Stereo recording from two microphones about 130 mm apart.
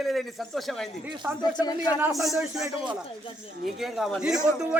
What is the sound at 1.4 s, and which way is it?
Speech, 30° left (ahead or behind).